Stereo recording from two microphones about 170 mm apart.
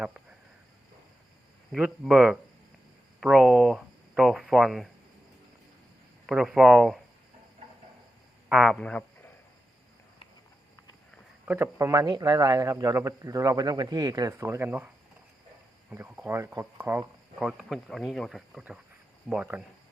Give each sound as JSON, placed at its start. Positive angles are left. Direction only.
{"t": 1.7, "sound": "speech", "side_deg": 0}
{"t": 6.2, "sound": "speech", "side_deg": -5}
{"t": 8.4, "sound": "a man's voice", "side_deg": -5}
{"t": 11.4, "sound": "speech", "side_deg": -15}
{"t": 15.9, "sound": "speech", "side_deg": -10}
{"t": 17.4, "sound": "speech", "side_deg": -5}